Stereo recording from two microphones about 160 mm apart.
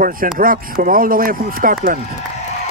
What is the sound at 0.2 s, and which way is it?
Speech, 55° right (ahead or behind).